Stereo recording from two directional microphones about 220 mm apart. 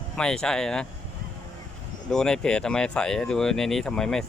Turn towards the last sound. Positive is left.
turn(degrees=5)  # may be behind; listen again after turning